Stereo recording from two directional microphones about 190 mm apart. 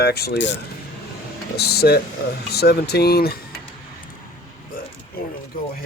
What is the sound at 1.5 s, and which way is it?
Speech, 55° left (ahead or behind).